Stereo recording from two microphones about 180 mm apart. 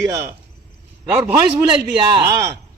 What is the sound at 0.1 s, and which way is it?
Speech, 20° right (ahead or behind).